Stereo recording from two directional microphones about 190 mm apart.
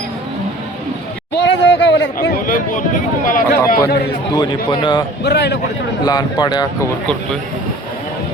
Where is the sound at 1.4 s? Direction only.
65° left (ahead or behind).